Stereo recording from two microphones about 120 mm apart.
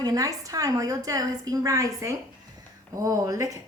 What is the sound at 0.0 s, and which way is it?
A woman's voice, 30° right (ahead or behind).